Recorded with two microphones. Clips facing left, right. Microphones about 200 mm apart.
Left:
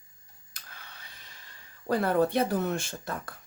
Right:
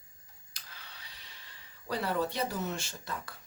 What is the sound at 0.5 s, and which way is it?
Speech, 50° left (ahead or behind).